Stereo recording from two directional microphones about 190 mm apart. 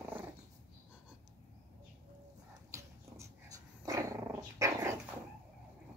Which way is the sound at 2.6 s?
15° right (ahead or behind).